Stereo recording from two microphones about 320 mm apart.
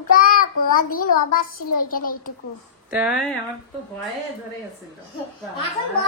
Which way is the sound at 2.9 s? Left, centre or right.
Centre.